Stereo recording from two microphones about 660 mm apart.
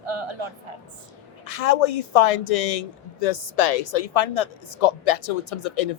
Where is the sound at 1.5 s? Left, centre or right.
Left.